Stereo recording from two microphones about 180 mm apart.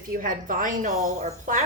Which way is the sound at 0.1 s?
50° right (ahead or behind).